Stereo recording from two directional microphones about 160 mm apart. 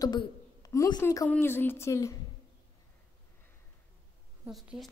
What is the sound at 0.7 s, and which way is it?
Speech, 25° left (ahead or behind).